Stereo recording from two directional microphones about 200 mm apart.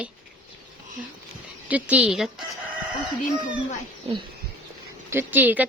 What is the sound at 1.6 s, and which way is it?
Speech, 5° right (ahead or behind).